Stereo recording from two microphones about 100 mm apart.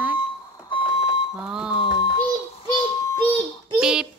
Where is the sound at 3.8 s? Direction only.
5° right (ahead or behind).